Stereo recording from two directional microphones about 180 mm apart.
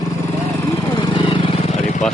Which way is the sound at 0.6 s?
15° left (ahead or behind).